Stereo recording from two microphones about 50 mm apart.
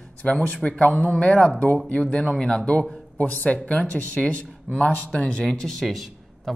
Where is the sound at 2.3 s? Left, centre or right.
Centre.